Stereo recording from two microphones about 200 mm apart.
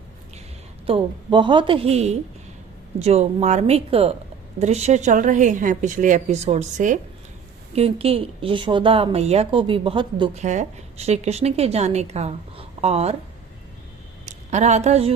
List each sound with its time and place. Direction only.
0.9 s a woman's voice: 25° right (ahead or behind)
10.4 s a woman's voice: 35° right (ahead or behind)
14.3 s a woman's voice: 35° right (ahead or behind)